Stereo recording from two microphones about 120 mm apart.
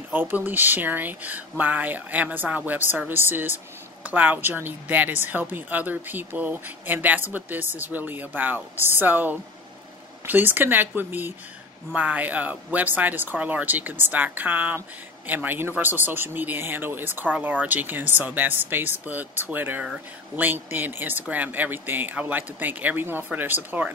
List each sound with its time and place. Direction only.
0.1 s speech: 15° right (ahead or behind)